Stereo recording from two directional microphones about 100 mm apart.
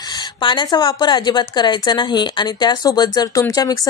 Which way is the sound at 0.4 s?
50° left (ahead or behind).